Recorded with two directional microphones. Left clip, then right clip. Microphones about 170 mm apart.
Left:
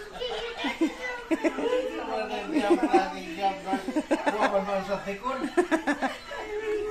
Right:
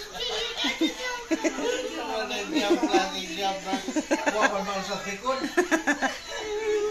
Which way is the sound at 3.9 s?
5° left (ahead or behind).